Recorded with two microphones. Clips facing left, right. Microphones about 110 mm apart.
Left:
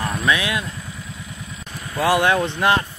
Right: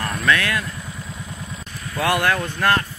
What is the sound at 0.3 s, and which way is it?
Speech, 15° left (ahead or behind).